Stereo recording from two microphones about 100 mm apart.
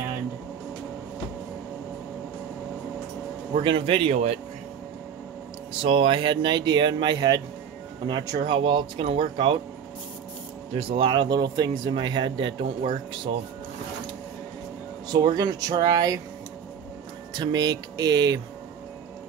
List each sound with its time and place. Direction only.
3.5 s speech: 60° right (ahead or behind); by 4.4 s 90° right
5.8 s speech: 60° right (ahead or behind); by 8.4 s 40° right (ahead or behind)
8.4 s speech: 60° right (ahead or behind)
9.0 s speech: 65° right (ahead or behind)
10.7 s speech: 65° right (ahead or behind)
15.0 s speech: 40° right (ahead or behind)
17.3 s speech: 45° right (ahead or behind)